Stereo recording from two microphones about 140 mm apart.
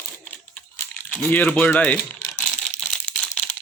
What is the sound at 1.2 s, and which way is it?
Speech, 10° left (ahead or behind).